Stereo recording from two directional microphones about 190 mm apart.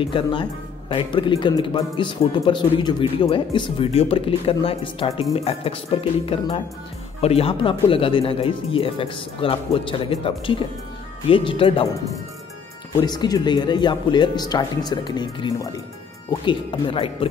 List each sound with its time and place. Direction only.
0.0 s a man's voice: 25° left (ahead or behind)
12.9 s a man's voice: 20° left (ahead or behind)